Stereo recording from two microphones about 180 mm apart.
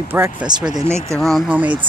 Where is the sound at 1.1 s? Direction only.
Centre (ahead or behind).